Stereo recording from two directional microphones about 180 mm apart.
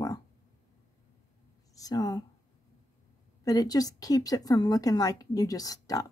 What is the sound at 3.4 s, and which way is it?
A woman's voice, 20° left (ahead or behind).